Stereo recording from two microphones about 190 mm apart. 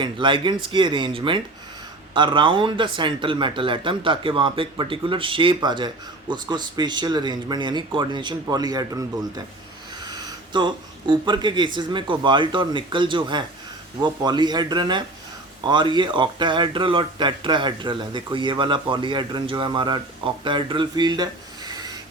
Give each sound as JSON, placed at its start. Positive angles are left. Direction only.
{"t": 0.0, "sound": "speech", "side_deg": -25}